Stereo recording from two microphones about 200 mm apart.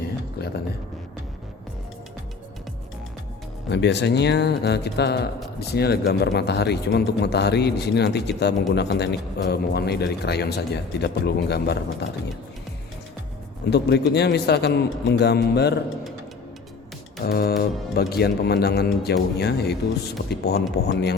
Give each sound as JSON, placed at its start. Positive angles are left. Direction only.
{"t": 0.4, "sound": "a sound", "side_deg": 55}
{"t": 3.7, "sound": "speech", "side_deg": 60}
{"t": 13.7, "sound": "speech", "side_deg": 55}
{"t": 17.2, "sound": "speech", "side_deg": 50}